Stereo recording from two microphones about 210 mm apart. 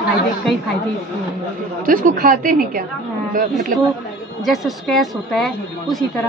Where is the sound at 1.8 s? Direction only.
40° right (ahead or behind).